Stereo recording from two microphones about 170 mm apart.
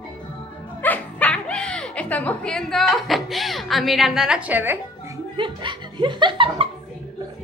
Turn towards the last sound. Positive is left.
turn(degrees=-30)  # may be behind; listen again after turning